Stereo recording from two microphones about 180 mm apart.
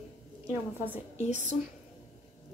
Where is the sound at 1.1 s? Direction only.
40° left (ahead or behind).